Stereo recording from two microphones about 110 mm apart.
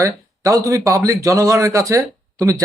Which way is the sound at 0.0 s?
30° right (ahead or behind).